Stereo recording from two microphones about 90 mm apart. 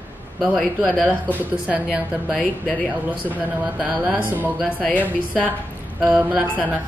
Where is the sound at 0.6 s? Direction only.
Centre (ahead or behind).